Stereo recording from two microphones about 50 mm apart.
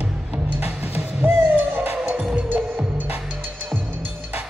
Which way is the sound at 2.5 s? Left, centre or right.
Right.